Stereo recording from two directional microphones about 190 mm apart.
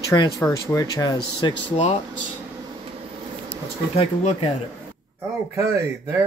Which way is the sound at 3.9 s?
35° left (ahead or behind).